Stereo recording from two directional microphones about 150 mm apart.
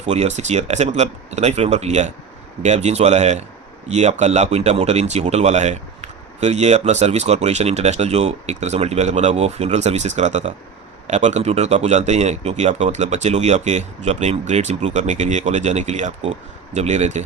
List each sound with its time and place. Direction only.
0.0 s speech: 50° right (ahead or behind)